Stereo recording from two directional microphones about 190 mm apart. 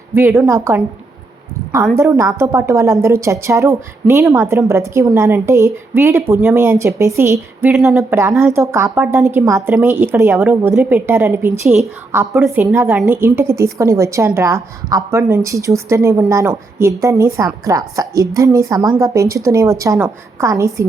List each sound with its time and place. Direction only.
0.1 s a woman's voice: 15° right (ahead or behind)
2.0 s a woman's voice: 15° right (ahead or behind)